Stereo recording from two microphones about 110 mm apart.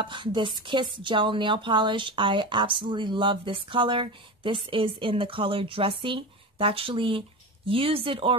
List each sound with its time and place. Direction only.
0.0 s speech: 45° right (ahead or behind)